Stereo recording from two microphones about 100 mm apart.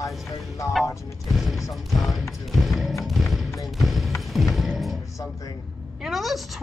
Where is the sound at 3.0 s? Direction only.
Centre (ahead or behind).